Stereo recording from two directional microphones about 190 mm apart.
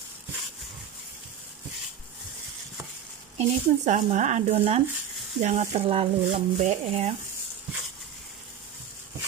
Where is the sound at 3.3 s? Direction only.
40° right (ahead or behind).